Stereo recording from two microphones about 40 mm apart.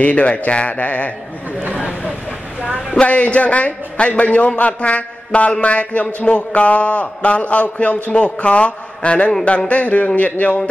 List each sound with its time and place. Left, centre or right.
0.0 s speech: left
1.8 s a sound: right
2.9 s speech: left